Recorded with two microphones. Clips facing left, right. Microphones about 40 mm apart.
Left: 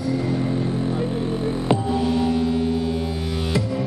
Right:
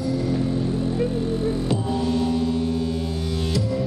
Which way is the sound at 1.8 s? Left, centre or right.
Centre.